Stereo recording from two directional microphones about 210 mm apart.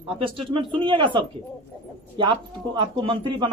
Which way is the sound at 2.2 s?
20° right (ahead or behind).